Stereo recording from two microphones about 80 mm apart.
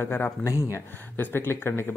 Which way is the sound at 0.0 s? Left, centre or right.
Left.